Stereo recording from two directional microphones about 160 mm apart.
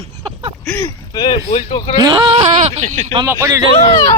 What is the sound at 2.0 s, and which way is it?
Speech, 30° right (ahead or behind).